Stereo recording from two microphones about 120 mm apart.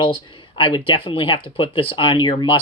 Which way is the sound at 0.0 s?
45° left (ahead or behind).